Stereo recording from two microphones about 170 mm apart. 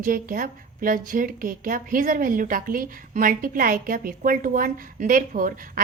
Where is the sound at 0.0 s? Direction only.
55° right (ahead or behind).